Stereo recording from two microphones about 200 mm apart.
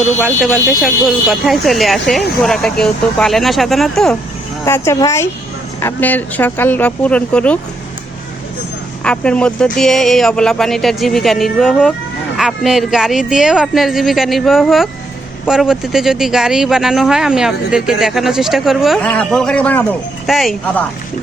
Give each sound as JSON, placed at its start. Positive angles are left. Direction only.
{"t": 0.4, "sound": "speech", "side_deg": 0}
{"t": 4.6, "sound": "speech", "side_deg": 15}
{"t": 9.0, "sound": "speech", "side_deg": 5}